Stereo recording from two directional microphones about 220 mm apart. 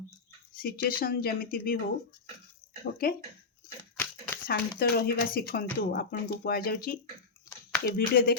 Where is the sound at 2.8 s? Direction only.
40° left (ahead or behind).